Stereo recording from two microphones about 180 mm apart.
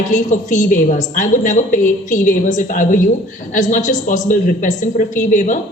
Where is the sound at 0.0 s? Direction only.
45° left (ahead or behind).